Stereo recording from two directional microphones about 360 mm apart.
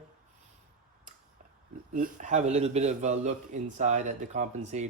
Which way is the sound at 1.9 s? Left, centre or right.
Right.